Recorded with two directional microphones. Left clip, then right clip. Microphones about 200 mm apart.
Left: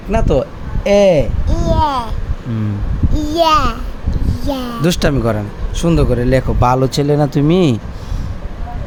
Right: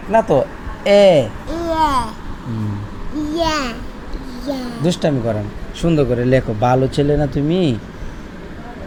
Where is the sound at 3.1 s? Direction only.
40° left (ahead or behind).